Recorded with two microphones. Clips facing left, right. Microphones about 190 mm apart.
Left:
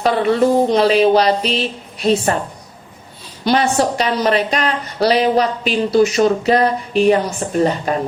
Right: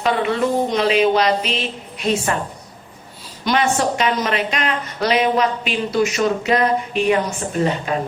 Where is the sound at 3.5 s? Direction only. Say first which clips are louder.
Left 3 dB; 35° left (ahead or behind).